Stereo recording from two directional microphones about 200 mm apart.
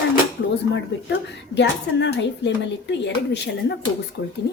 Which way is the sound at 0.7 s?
60° left (ahead or behind).